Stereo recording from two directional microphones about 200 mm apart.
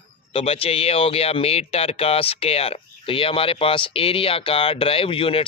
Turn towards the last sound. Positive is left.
turn(degrees=25)  # may be behind; listen again after turning